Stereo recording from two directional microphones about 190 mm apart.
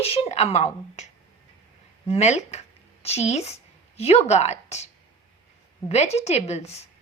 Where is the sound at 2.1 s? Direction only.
35° left (ahead or behind).